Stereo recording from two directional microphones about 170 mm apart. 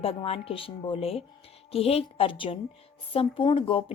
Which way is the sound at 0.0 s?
35° left (ahead or behind).